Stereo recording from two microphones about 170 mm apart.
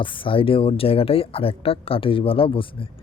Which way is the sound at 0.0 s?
30° left (ahead or behind).